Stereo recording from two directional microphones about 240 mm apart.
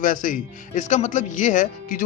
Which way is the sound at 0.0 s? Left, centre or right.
Left.